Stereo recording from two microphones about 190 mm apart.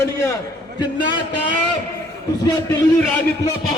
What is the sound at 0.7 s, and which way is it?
Speech, 25° left (ahead or behind).